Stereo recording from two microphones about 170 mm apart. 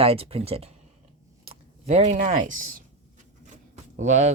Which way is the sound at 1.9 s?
40° right (ahead or behind).